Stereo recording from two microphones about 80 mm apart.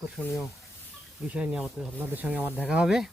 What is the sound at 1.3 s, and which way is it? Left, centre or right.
Speech, centre.